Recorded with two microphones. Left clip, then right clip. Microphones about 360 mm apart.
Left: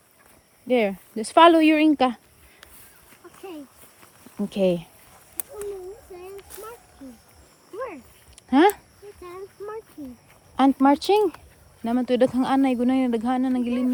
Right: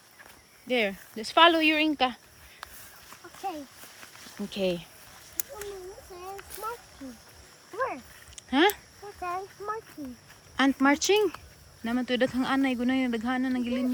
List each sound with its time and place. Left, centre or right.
0.7 s speech: centre
4.4 s speech: centre
7.8 s a sound: centre
8.4 s speech: centre
9.2 s speech: centre
10.6 s speech: centre